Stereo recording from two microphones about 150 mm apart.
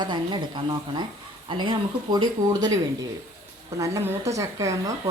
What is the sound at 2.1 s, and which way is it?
Speech, 25° right (ahead or behind).